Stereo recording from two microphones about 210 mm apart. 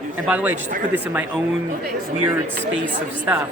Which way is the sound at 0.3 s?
10° right (ahead or behind).